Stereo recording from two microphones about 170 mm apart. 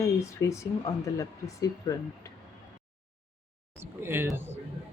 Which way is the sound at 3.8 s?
15° right (ahead or behind).